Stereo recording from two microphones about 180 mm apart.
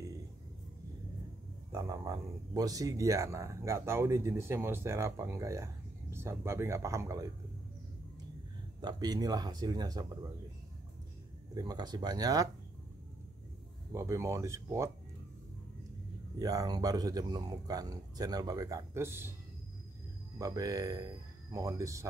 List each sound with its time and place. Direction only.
1.7 s speech: 20° right (ahead or behind)
8.8 s speech: 20° right (ahead or behind)
11.5 s speech: 20° right (ahead or behind)
13.9 s speech: 15° right (ahead or behind)
16.3 s speech: 20° right (ahead or behind)
20.3 s speech: 20° right (ahead or behind)